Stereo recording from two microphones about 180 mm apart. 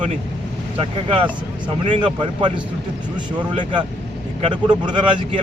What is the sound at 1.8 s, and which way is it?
Speech, 30° right (ahead or behind).